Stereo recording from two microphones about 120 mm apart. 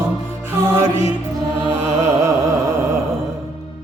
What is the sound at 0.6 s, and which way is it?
Music, 20° right (ahead or behind).